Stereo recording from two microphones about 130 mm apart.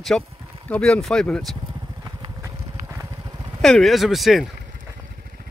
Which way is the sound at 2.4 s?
25° right (ahead or behind).